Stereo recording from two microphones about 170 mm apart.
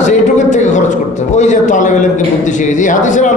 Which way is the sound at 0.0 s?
45° left (ahead or behind).